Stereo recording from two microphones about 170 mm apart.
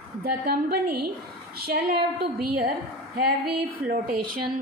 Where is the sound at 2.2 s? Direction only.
60° right (ahead or behind).